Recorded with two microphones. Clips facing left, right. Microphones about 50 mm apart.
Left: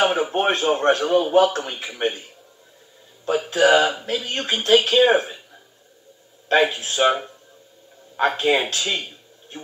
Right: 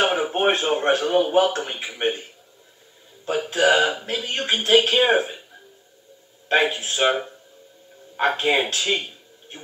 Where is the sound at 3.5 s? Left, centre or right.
Centre.